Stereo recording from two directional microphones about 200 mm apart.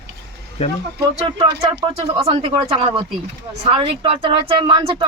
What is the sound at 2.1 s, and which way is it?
A man's voice, 30° right (ahead or behind).